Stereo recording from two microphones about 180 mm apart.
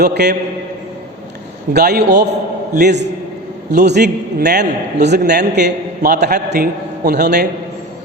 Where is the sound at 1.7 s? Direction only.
65° right (ahead or behind).